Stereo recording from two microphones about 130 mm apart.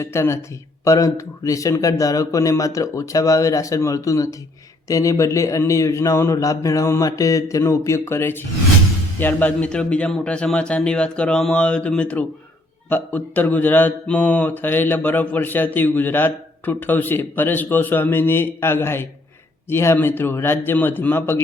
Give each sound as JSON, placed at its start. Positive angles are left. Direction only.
{"t": 0.0, "sound": "a man's voice", "side_deg": 20}